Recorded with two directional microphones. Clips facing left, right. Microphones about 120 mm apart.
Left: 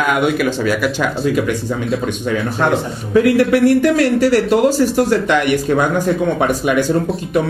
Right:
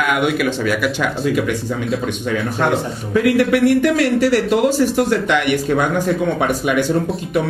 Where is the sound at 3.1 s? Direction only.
35° left (ahead or behind).